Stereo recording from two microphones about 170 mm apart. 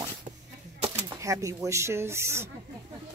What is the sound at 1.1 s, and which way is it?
Speech, 20° right (ahead or behind).